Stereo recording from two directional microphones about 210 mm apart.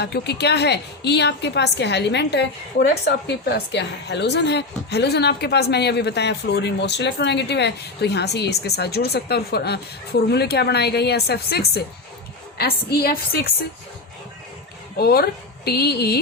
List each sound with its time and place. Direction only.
0.0 s speech: 50° left (ahead or behind)
14.9 s speech: 50° left (ahead or behind)